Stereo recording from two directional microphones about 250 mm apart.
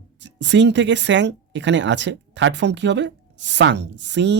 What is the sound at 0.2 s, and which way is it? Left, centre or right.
Speech, right.